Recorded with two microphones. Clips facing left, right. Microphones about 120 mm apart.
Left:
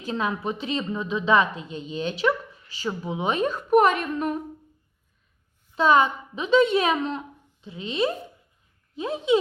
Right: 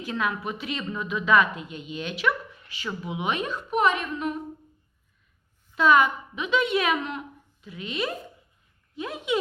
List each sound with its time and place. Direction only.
0.0 s a woman's voice: 30° left (ahead or behind)
5.7 s a woman's voice: 30° left (ahead or behind)